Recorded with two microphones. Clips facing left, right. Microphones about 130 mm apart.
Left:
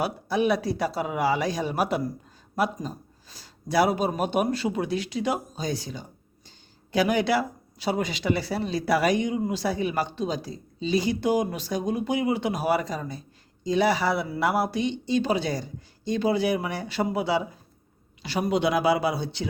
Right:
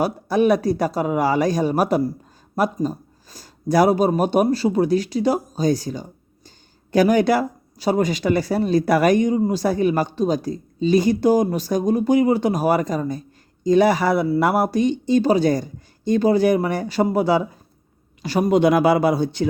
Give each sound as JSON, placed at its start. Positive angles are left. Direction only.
{"t": 0.0, "sound": "speech", "side_deg": -45}